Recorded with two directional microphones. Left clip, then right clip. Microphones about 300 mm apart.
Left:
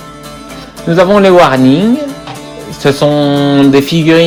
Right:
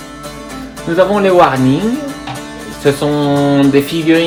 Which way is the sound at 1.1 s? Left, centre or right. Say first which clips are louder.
Left 5 dB; left.